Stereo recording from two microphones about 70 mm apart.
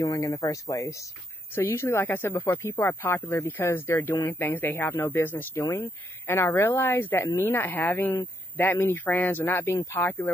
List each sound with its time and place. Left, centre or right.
0.0 s speech: left
1.5 s speech: left